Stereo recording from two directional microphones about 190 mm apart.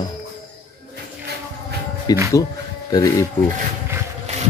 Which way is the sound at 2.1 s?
20° left (ahead or behind).